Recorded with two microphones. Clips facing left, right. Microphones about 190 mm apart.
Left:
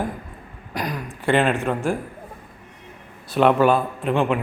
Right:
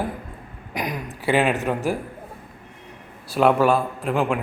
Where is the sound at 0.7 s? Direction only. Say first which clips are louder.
Even; 20° right (ahead or behind).